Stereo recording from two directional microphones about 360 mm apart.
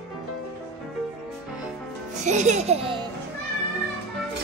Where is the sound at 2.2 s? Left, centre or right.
Centre.